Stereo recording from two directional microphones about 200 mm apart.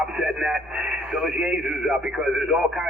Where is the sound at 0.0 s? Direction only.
5° right (ahead or behind).